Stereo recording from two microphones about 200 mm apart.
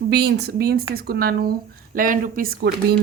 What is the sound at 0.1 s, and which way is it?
A woman's voice, 55° right (ahead or behind).